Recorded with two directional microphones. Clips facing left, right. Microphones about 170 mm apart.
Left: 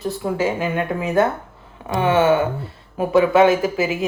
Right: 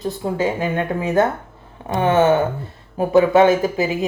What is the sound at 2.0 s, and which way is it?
Speech, 40° right (ahead or behind).